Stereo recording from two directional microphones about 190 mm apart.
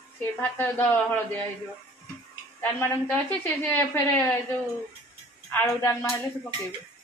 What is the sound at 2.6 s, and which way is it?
A woman's voice, 10° left (ahead or behind).